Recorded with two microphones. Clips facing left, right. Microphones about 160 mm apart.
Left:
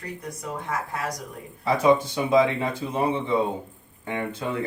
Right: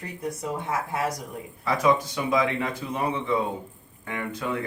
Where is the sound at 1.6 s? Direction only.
30° left (ahead or behind).